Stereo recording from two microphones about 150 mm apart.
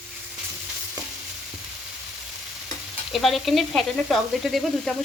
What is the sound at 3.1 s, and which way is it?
Stir, centre (ahead or behind).